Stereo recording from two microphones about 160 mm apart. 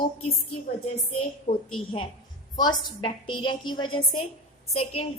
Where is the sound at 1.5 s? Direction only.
30° left (ahead or behind).